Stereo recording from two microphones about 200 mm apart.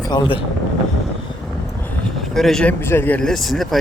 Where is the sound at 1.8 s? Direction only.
Centre (ahead or behind).